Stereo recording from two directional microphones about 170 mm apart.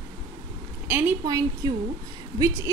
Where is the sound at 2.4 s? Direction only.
15° right (ahead or behind).